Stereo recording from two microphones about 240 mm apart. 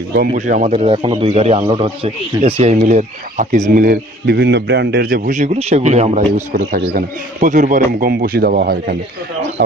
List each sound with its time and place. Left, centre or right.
0.3 s a man's voice: right